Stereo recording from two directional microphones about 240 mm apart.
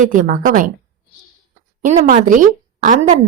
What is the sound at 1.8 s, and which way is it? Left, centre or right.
A woman's voice, right.